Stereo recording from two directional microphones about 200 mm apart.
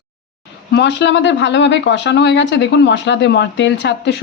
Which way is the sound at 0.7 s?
60° left (ahead or behind).